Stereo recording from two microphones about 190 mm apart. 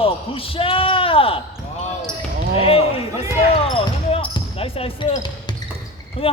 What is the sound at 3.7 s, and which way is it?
Basketball bounce, 30° left (ahead or behind).